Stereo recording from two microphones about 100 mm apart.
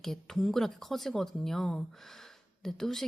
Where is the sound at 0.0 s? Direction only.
5° left (ahead or behind).